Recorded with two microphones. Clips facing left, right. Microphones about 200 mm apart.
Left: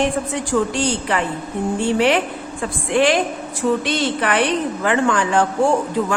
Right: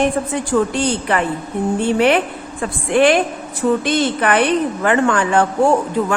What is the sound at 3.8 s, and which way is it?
A man's voice, 50° right (ahead or behind).